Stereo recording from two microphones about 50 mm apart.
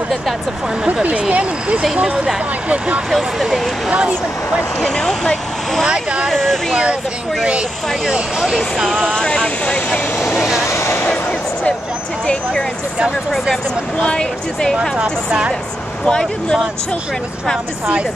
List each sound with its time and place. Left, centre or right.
1.3 s speech: right
3.1 s speech: centre
4.8 s speech: centre
8.8 s speech: centre
10.8 s a sound: left
14.0 s speech: centre
15.0 s speech: right
16.1 s speech: centre